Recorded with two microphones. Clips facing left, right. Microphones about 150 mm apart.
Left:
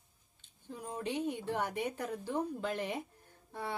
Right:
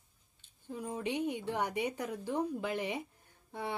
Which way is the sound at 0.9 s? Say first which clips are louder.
Right 1 dB; 15° right (ahead or behind).